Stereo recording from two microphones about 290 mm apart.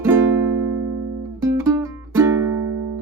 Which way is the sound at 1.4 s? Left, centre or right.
Centre.